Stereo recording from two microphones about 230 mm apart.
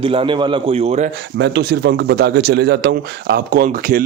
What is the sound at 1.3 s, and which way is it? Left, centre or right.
Speech, right.